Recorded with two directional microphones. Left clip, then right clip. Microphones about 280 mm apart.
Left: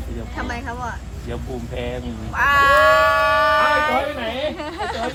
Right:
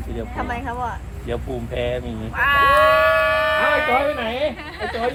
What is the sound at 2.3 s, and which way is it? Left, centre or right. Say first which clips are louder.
Cat: left 1 dB; centre.